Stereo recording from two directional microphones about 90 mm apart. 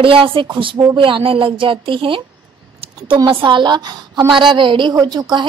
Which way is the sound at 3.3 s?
65° right (ahead or behind).